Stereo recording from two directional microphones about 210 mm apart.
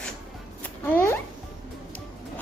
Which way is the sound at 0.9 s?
10° left (ahead or behind).